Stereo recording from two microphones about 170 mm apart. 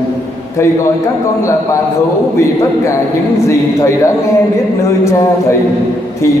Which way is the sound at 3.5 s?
15° left (ahead or behind).